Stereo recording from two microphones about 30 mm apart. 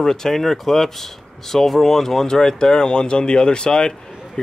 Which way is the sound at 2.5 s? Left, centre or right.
Left.